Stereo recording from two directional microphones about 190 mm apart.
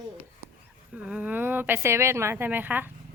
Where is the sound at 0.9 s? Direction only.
5° right (ahead or behind).